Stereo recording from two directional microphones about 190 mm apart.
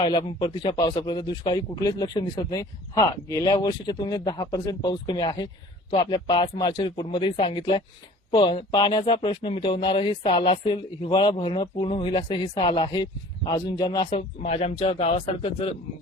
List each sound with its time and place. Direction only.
0.0 s speech: 25° left (ahead or behind)